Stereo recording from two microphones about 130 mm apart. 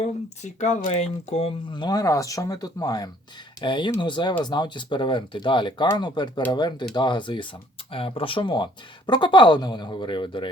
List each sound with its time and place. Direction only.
0.0 s speech: 60° left (ahead or behind)
1.8 s speech: 30° left (ahead or behind)